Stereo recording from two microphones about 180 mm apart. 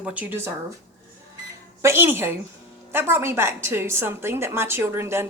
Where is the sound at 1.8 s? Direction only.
15° right (ahead or behind).